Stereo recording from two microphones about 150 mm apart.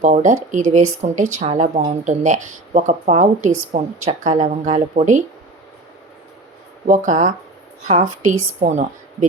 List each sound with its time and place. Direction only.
0.0 s speech: 55° right (ahead or behind)
6.8 s speech: 60° right (ahead or behind)